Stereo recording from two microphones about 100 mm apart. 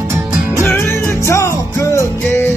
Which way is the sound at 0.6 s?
25° left (ahead or behind).